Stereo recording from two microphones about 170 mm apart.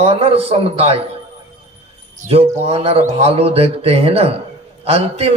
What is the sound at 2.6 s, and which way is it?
Speech, 35° right (ahead or behind).